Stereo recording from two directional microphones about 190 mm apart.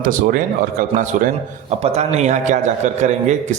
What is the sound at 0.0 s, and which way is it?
Speech, 50° right (ahead or behind).